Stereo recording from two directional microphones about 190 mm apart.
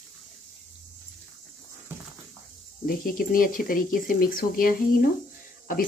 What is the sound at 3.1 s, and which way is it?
Speech, 50° left (ahead or behind).